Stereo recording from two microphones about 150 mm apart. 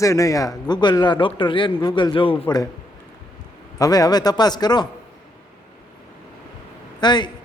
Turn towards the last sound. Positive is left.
turn(degrees=30)  # may be behind; listen again after turning